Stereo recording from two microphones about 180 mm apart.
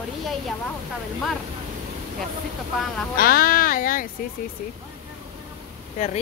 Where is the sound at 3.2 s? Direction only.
55° left (ahead or behind).